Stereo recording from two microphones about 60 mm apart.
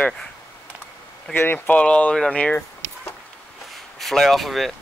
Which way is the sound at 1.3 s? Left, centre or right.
Left.